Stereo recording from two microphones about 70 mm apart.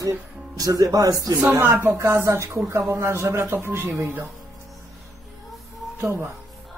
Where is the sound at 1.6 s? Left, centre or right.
Right.